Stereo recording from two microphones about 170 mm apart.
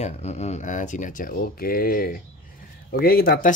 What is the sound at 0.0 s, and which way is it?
Speech, 40° left (ahead or behind).